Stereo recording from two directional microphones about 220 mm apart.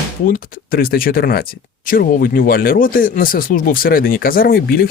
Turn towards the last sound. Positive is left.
turn(degrees=40)  # may be behind; listen again after turning